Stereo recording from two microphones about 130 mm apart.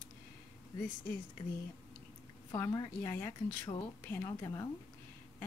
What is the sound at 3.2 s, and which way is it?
Speech, 15° left (ahead or behind).